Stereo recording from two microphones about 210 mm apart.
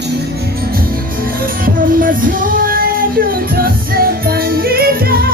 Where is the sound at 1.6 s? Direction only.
40° right (ahead or behind).